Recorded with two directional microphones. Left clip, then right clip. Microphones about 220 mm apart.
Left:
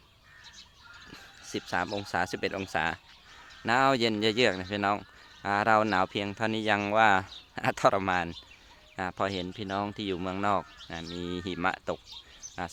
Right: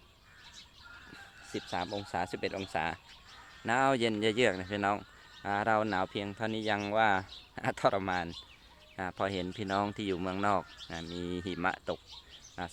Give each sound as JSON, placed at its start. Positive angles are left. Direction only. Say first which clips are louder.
{"t": 1.5, "sound": "speech", "louder": "left 5 dB", "side_deg": 25}